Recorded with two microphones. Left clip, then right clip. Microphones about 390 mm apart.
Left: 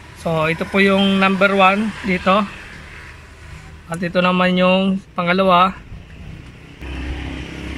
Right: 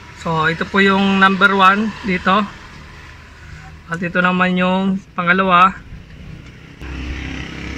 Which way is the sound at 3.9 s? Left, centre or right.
Centre.